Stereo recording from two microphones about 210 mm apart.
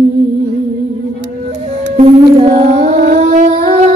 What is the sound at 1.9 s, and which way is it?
Music, 30° right (ahead or behind).